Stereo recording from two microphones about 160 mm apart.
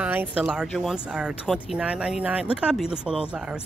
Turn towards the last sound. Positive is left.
turn(degrees=-5)  # may be behind; listen again after turning